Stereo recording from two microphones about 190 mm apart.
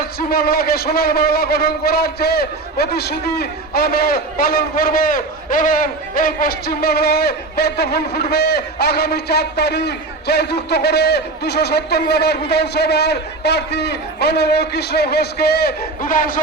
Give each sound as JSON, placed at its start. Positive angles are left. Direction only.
{"t": 0.2, "sound": "a man's voice", "side_deg": 50}